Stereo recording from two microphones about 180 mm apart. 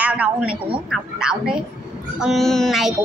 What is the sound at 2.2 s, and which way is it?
Child singing, centre (ahead or behind).